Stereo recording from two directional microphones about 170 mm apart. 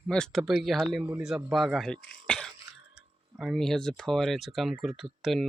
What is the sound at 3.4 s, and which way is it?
Speech, centre (ahead or behind).